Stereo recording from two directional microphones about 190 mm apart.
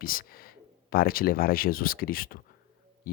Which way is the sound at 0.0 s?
50° left (ahead or behind).